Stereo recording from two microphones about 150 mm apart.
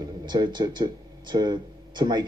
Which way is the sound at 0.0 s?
25° right (ahead or behind).